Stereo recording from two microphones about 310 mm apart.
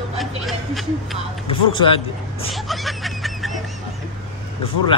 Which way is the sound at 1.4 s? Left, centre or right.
Centre.